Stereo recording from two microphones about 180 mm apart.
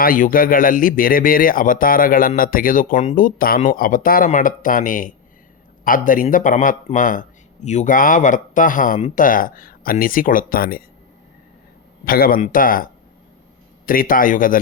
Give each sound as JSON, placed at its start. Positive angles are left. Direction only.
{"t": 0.0, "sound": "speech", "side_deg": 50}
{"t": 12.0, "sound": "speech", "side_deg": 55}